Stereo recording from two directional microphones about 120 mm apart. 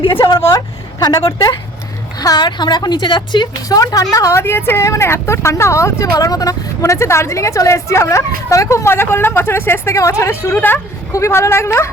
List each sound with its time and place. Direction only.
0.4 s a woman's voice: 30° left (ahead or behind)